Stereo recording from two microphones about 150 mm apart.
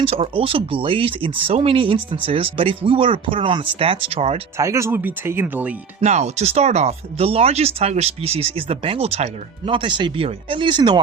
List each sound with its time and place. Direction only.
0.0 s speech: 40° right (ahead or behind)
4.5 s speech: 20° right (ahead or behind)
6.0 s speech: 50° right (ahead or behind); by 11.0 s 30° right (ahead or behind)